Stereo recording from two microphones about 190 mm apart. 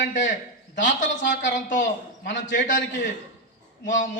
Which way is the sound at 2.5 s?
40° left (ahead or behind).